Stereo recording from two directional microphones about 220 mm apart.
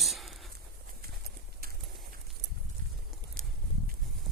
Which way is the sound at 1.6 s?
45° right (ahead or behind).